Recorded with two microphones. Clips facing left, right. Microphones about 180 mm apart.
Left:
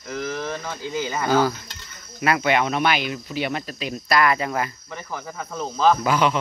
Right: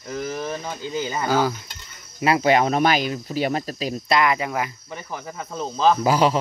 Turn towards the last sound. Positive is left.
turn(degrees=-35)  # may be behind; listen again after turning